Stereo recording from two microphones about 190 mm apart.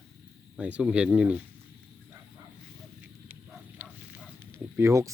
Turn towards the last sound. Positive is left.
turn(degrees=-15)  # may be behind; listen again after turning